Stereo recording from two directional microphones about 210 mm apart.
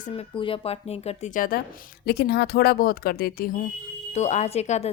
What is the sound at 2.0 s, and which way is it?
Speech, 50° left (ahead or behind).